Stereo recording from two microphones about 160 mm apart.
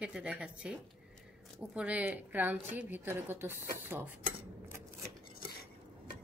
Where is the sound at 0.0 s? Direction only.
5° right (ahead or behind).